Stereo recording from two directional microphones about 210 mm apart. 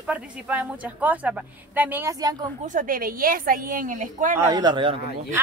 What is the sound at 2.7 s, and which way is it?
A woman's voice, 40° right (ahead or behind).